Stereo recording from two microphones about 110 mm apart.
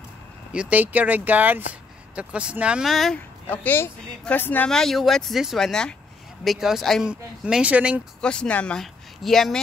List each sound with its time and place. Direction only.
0.5 s speech: 10° right (ahead or behind)
2.9 s speech: centre (ahead or behind)
3.4 s speech: 15° left (ahead or behind)
4.6 s speech: 5° left (ahead or behind); by 8.0 s 10° right (ahead or behind)
8.2 s speech: 10° left (ahead or behind)